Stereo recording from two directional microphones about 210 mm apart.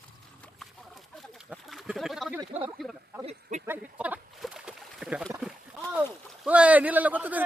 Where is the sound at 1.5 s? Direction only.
Centre (ahead or behind).